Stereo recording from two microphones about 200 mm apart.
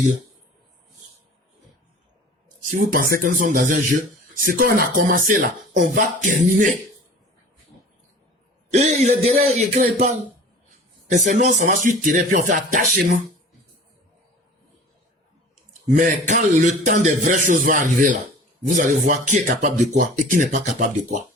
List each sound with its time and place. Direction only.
2.7 s speech: 45° right (ahead or behind)
8.7 s a man's voice: 35° right (ahead or behind)
16.0 s a man's voice: 40° right (ahead or behind)